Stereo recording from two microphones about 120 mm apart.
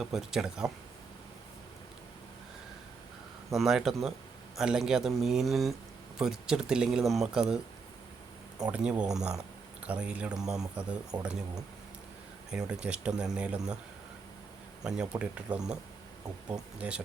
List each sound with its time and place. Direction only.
0.0 s speech: 5° right (ahead or behind)
3.5 s speech: centre (ahead or behind)
8.7 s speech: 10° right (ahead or behind)
14.8 s speech: 10° right (ahead or behind)